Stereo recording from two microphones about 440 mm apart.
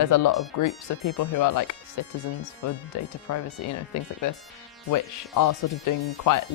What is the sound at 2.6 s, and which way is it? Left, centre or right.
Speech, left.